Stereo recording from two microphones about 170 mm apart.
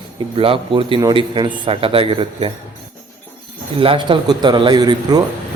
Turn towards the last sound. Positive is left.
turn(degrees=-25)  # may be behind; listen again after turning